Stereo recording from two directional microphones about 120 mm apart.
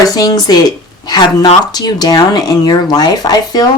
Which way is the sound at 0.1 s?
35° left (ahead or behind).